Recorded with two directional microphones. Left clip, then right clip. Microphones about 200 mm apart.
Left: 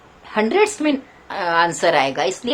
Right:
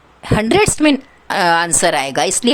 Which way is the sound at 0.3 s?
55° right (ahead or behind).